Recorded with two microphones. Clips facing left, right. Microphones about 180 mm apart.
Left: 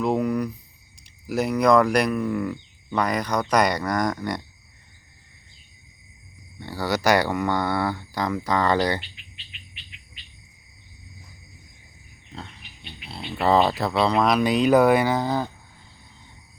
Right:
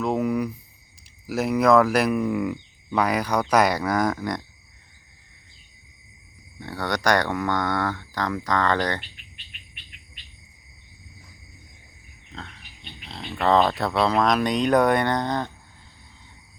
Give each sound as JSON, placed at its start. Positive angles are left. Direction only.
{"t": 0.0, "sound": "a sound", "side_deg": 0}
{"t": 1.3, "sound": "speech", "side_deg": 0}
{"t": 6.6, "sound": "speech", "side_deg": 0}
{"t": 9.9, "sound": "bird", "side_deg": -50}
{"t": 12.3, "sound": "pig", "side_deg": 10}
{"t": 13.1, "sound": "speech", "side_deg": 10}